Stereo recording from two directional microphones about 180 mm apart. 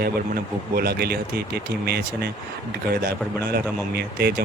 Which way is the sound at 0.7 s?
60° right (ahead or behind).